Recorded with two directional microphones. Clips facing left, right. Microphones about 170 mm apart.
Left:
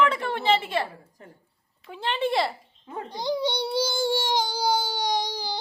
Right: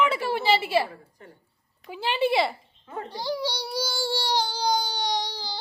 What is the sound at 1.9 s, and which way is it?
Speech, 5° right (ahead or behind).